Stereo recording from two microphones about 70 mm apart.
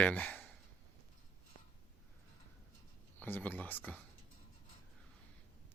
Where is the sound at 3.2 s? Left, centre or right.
Left.